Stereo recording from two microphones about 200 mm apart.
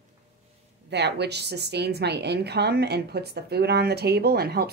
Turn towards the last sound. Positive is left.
turn(degrees=-50)  # may be behind; listen again after turning